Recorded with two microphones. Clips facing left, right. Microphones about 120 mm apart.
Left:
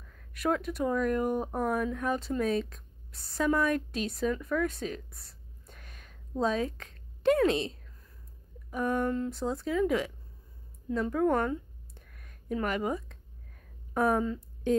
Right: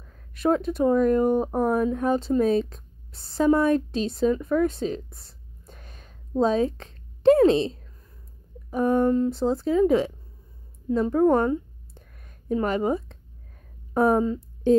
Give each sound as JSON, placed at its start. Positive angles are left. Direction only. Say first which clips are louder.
{"t": 0.0, "sound": "speech", "louder": "right 7 dB", "side_deg": -30}
{"t": 10.9, "sound": "a sound", "louder": "right 7 dB", "side_deg": -30}
{"t": 13.9, "sound": "speech", "louder": "right 6 dB", "side_deg": -30}